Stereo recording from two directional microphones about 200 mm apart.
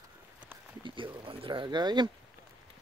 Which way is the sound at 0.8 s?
25° right (ahead or behind).